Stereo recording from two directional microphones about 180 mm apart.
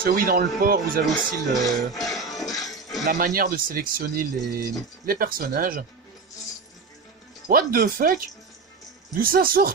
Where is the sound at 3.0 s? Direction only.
50° right (ahead or behind).